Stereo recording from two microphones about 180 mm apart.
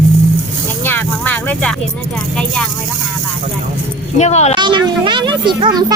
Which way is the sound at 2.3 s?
5° left (ahead or behind).